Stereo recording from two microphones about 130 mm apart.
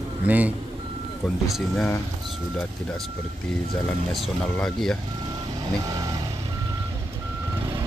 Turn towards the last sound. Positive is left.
turn(degrees=-30)  # may be behind; listen again after turning